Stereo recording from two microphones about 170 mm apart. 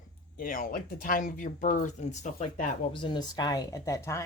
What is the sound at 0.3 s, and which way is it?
Speech, 55° left (ahead or behind).